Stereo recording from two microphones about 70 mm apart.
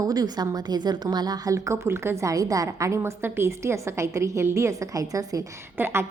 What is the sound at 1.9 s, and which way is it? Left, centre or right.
A woman's voice, right.